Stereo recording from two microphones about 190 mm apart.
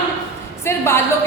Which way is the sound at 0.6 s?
15° left (ahead or behind).